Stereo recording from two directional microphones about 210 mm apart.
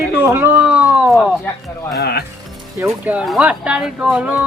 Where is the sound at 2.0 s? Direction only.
50° left (ahead or behind).